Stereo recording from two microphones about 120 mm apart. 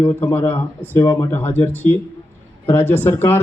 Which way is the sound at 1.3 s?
15° left (ahead or behind).